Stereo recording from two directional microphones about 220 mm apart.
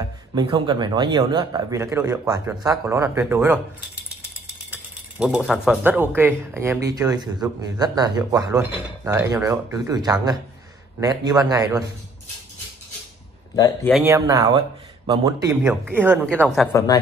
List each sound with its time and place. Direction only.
0.3 s a man's voice: 20° right (ahead or behind)
5.2 s a man's voice: 5° right (ahead or behind)
14.0 s a man's voice: 15° right (ahead or behind)
16.7 s speech: 15° left (ahead or behind)